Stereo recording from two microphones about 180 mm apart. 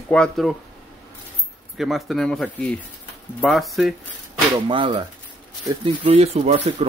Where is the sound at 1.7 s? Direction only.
Centre (ahead or behind).